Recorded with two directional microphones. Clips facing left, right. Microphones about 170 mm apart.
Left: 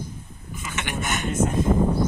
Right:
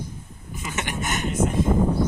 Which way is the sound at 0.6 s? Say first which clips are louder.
Right 2 dB; 35° right (ahead or behind).